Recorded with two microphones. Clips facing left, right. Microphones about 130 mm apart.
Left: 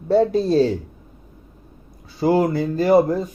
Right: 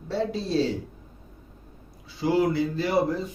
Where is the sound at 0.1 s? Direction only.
45° left (ahead or behind).